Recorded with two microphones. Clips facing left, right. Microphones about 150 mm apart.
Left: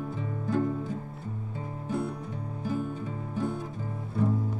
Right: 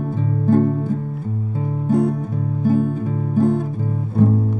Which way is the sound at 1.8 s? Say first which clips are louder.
Right 14 dB; 45° right (ahead or behind).